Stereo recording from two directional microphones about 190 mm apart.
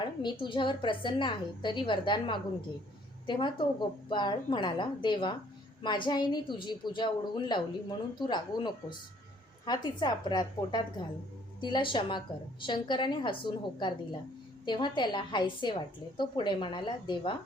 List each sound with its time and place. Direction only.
0.0 s a woman's voice: 25° left (ahead or behind)